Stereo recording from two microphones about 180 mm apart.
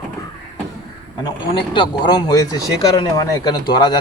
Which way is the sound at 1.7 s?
25° left (ahead or behind).